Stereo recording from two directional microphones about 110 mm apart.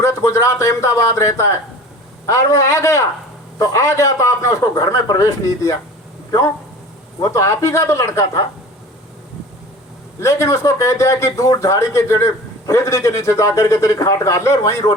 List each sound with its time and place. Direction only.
0.0 s speech: 25° left (ahead or behind)
7.2 s speech: 25° left (ahead or behind)
10.2 s speech: 25° left (ahead or behind)